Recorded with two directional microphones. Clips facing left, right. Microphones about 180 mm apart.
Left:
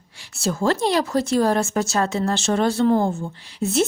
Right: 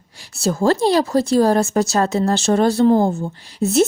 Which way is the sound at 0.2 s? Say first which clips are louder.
Right 4 dB; 40° right (ahead or behind).